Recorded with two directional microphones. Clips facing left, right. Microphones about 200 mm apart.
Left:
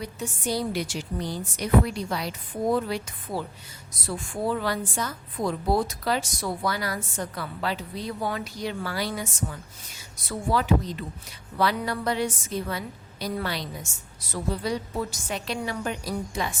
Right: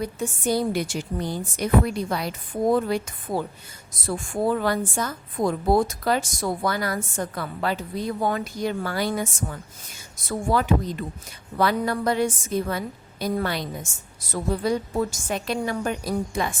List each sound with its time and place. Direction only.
0.0 s a woman's voice: 50° right (ahead or behind)